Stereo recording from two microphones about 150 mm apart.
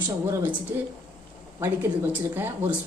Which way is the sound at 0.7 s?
15° right (ahead or behind).